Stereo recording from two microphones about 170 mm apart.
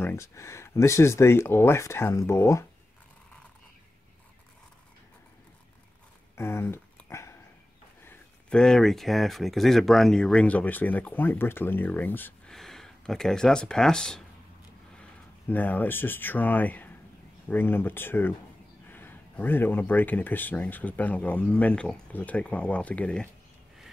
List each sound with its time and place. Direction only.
0.0 s speech: 15° left (ahead or behind)
6.3 s a sound: 15° left (ahead or behind)
8.0 s speech: 10° left (ahead or behind)